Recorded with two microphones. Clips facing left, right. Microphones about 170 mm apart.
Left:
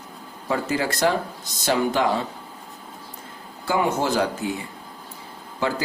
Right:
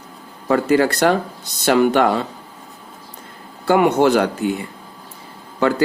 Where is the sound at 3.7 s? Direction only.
65° right (ahead or behind).